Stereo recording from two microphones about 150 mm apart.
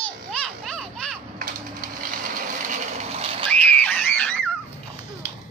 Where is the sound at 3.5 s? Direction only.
5° left (ahead or behind).